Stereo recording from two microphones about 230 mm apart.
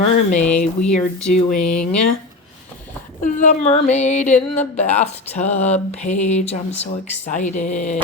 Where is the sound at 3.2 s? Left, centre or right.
Left.